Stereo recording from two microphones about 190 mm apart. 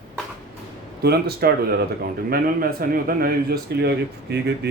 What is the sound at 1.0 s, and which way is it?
A man's voice, 55° right (ahead or behind).